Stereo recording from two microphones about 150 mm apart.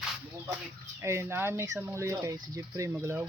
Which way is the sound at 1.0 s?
20° right (ahead or behind).